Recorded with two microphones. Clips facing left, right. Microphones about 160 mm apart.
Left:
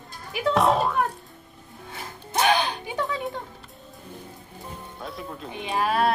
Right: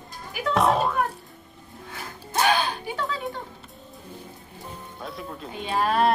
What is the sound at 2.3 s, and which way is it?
Music, 20° left (ahead or behind).